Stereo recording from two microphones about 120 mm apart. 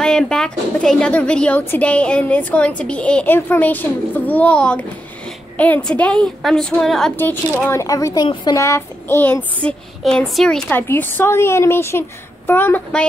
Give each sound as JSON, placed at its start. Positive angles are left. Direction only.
{"t": 0.0, "sound": "a woman's voice", "side_deg": 5}
{"t": 7.7, "sound": "a woman's voice", "side_deg": 25}
{"t": 8.5, "sound": "a woman's voice", "side_deg": 25}
{"t": 10.8, "sound": "a woman's voice", "side_deg": 15}